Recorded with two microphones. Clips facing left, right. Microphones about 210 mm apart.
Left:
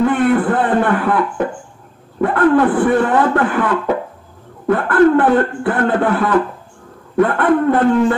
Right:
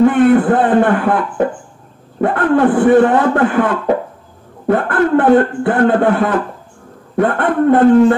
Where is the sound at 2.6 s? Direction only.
45° right (ahead or behind).